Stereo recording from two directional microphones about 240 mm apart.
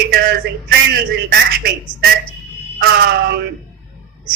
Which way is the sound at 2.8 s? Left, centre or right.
Right.